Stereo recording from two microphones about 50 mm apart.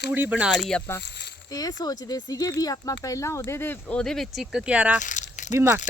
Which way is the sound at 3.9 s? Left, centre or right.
Centre.